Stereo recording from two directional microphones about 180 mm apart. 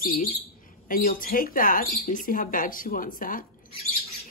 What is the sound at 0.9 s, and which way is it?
Speech, 50° left (ahead or behind).